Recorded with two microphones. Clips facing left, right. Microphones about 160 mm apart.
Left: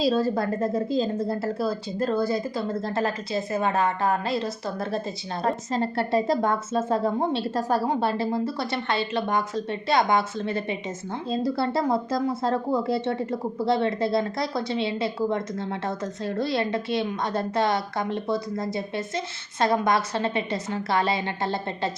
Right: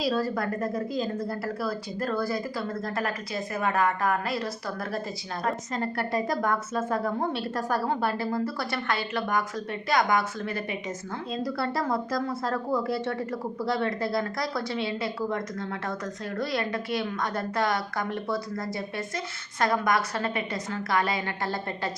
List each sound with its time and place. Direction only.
0.0 s speech: 25° left (ahead or behind)